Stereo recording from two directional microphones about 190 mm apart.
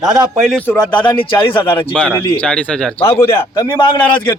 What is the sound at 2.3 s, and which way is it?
Speech, 5° left (ahead or behind).